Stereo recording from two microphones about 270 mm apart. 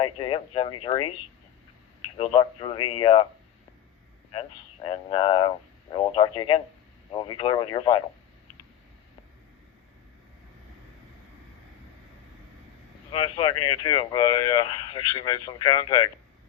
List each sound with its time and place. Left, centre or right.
0.0 s speech: centre
2.1 s speech: centre
4.3 s speech: centre
13.1 s speech: centre